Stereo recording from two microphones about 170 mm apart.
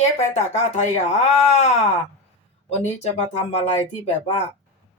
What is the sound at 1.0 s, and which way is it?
Speech, 40° left (ahead or behind).